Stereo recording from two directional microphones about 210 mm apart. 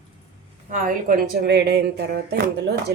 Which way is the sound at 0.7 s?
40° right (ahead or behind).